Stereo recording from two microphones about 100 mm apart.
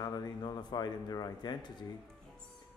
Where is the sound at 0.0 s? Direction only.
45° left (ahead or behind).